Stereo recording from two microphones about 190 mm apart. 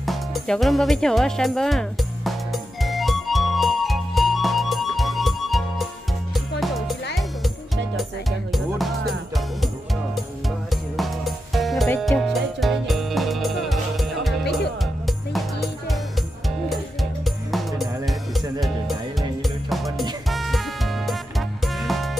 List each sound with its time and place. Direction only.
0.0 s music: centre (ahead or behind)
10.7 s music: centre (ahead or behind)